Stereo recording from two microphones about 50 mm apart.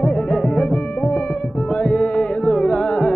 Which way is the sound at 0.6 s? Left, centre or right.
Left.